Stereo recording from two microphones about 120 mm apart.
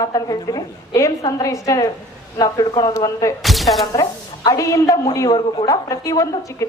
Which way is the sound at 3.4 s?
Centre (ahead or behind).